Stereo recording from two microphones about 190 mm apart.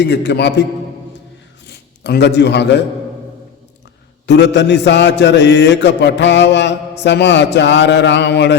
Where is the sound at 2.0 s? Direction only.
60° left (ahead or behind).